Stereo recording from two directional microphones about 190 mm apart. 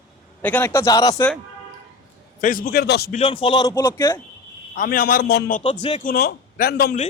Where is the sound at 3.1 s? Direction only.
30° left (ahead or behind).